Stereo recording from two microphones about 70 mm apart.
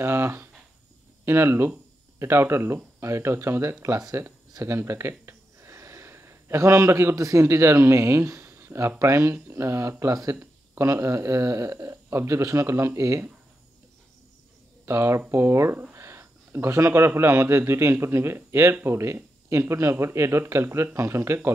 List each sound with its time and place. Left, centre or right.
0.0 s a man's voice: right
14.9 s a man's voice: right